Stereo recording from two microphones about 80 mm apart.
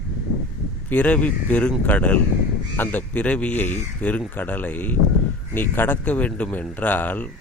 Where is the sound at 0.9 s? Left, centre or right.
Centre.